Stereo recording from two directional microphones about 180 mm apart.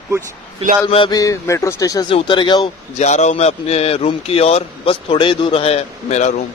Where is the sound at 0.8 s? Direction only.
30° left (ahead or behind).